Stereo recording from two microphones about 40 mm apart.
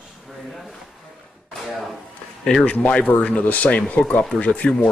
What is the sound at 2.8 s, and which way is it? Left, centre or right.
Speech, left.